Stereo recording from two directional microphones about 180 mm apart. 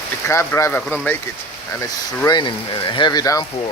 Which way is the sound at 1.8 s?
20° left (ahead or behind).